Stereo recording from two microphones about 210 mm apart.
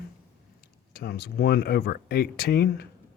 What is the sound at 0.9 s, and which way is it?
Speech, 50° left (ahead or behind).